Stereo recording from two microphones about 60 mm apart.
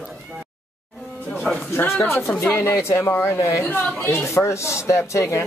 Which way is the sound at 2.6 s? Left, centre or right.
Left.